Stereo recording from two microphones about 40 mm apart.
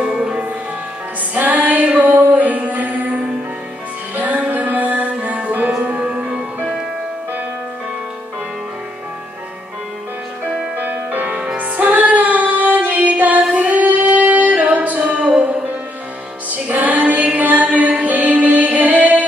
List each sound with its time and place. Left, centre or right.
0.0 s music: centre
1.4 s music: right
4.1 s music: right
10.8 s music: right
11.3 s music: right
16.4 s music: right